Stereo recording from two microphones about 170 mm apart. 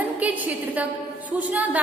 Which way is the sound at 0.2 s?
10° right (ahead or behind).